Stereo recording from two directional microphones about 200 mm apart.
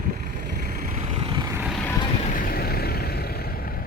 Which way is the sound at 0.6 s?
40° right (ahead or behind).